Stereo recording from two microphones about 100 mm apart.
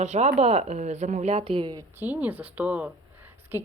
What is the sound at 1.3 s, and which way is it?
Speech, 80° right.